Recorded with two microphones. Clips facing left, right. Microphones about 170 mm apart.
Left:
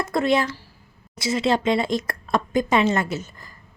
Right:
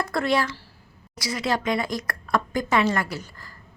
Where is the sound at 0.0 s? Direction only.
20° left (ahead or behind).